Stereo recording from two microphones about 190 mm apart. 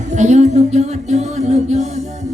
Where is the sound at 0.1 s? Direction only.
40° right (ahead or behind).